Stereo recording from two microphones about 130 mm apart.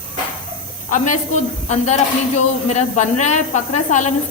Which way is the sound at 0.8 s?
75° left (ahead or behind).